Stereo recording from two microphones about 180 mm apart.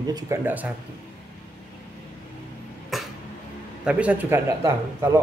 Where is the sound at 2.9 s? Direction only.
Centre (ahead or behind).